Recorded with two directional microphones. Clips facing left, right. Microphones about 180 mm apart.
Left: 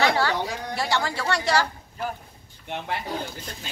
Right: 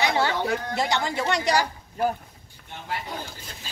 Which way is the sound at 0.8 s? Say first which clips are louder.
Left 2 dB; 20° right (ahead or behind).